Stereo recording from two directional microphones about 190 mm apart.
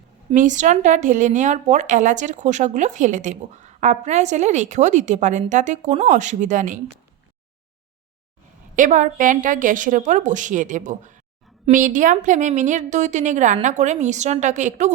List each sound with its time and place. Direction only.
0.3 s speech: 40° right (ahead or behind)
8.7 s speech: 45° right (ahead or behind)